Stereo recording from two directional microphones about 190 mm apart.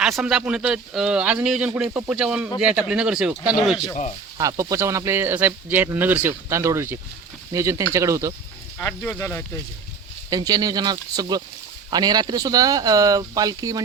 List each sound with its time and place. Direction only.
0.0 s a man's voice: centre (ahead or behind)
4.4 s speech: 20° right (ahead or behind)
8.8 s speech: 10° left (ahead or behind)
10.2 s speech: 20° right (ahead or behind)